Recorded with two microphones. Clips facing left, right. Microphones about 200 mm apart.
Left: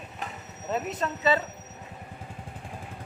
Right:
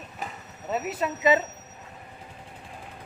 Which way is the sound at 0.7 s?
5° right (ahead or behind).